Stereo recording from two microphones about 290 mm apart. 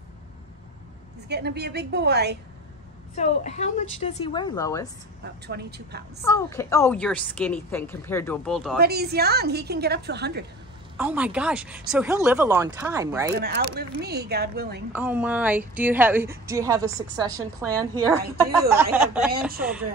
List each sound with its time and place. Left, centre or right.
1.3 s a woman's voice: right
3.2 s a woman's voice: left
5.2 s a woman's voice: right
6.2 s a woman's voice: centre
8.7 s a woman's voice: right
11.0 s speech: centre
13.3 s a woman's voice: right
14.9 s a woman's voice: centre